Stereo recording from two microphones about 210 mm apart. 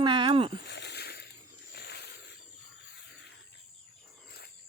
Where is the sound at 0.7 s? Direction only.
55° left (ahead or behind).